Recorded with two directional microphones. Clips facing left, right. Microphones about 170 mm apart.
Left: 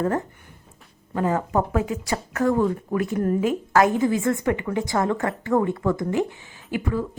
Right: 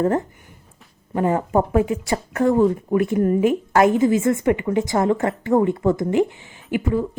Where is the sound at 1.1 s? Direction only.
25° right (ahead or behind).